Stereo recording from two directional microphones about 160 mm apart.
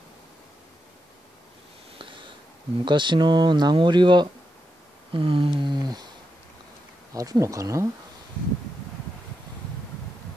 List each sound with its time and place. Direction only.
2.0 s sniff: 30° right (ahead or behind)
2.8 s speech: 30° right (ahead or behind)
7.2 s speech: 20° right (ahead or behind)